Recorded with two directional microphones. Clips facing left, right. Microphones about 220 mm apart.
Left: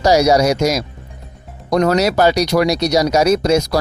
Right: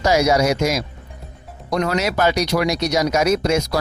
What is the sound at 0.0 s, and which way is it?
Speech, 35° left (ahead or behind).